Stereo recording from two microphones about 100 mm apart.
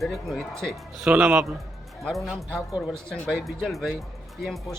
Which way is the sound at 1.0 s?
10° right (ahead or behind).